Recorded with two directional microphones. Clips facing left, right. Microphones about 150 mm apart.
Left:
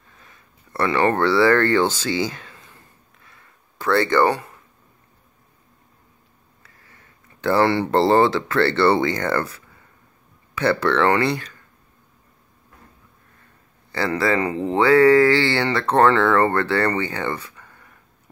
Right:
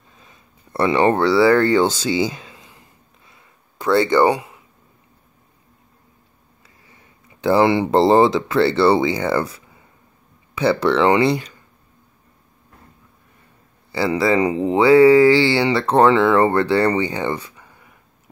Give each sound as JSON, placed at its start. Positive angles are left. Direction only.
{"t": 0.1, "sound": "a sound", "side_deg": -20}
{"t": 6.6, "sound": "speech", "side_deg": -15}
{"t": 13.9, "sound": "speech", "side_deg": -10}